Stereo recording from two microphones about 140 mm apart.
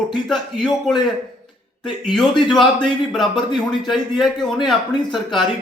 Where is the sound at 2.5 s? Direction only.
Centre (ahead or behind).